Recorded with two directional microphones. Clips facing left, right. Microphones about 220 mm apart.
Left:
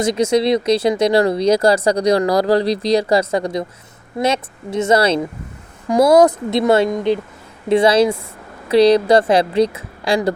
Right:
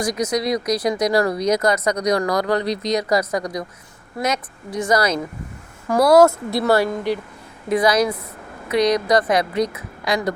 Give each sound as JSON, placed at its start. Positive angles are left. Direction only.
{"t": 0.0, "sound": "speech", "side_deg": 25}